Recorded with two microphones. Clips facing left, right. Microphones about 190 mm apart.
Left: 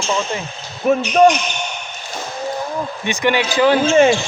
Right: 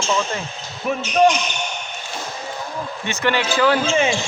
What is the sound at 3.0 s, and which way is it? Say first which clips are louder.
Speech: left 3 dB; 15° left (ahead or behind).